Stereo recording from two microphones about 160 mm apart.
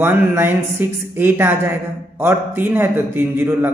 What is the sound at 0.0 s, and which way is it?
Speech, 15° right (ahead or behind).